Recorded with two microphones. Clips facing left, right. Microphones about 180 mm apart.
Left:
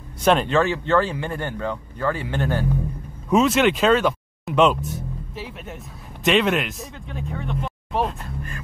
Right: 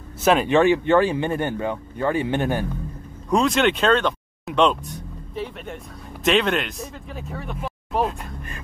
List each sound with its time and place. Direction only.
0.2 s speech: 5° right (ahead or behind)
0.5 s speech: 15° right (ahead or behind)
3.3 s speech: 5° left (ahead or behind)